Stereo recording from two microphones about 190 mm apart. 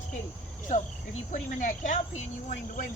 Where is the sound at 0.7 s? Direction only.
40° left (ahead or behind).